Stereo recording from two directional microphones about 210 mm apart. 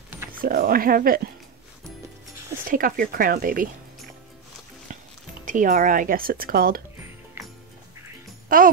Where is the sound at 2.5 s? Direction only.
45° right (ahead or behind).